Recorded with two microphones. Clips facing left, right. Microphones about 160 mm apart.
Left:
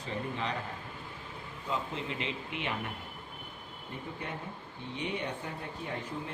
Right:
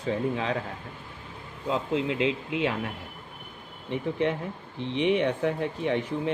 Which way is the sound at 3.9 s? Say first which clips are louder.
Right 14 dB; 90° right.